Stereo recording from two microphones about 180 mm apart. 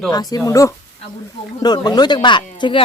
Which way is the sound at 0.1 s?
20° left (ahead or behind).